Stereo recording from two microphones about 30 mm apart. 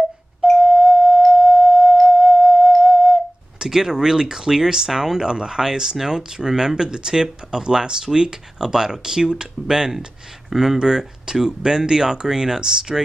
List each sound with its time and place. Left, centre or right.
0.6 s doorbell: right
1.4 s music: right
2.8 s whistle: right
3.5 s speech: centre
10.5 s speech: centre
10.8 s speech: right